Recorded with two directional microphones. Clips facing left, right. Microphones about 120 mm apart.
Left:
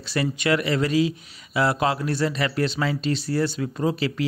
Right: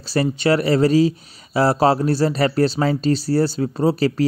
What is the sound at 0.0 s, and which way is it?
Speech, 35° right (ahead or behind).